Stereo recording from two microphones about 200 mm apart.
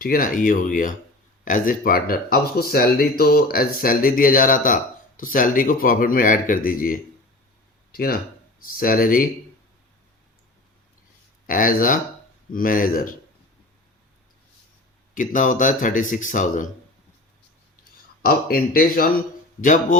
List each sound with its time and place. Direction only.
0.0 s speech: 45° left (ahead or behind)
11.4 s speech: 40° left (ahead or behind)
15.1 s speech: 40° left (ahead or behind)
18.2 s speech: 50° left (ahead or behind)